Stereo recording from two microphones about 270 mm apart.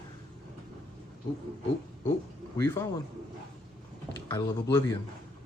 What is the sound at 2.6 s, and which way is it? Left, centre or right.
Speech, centre.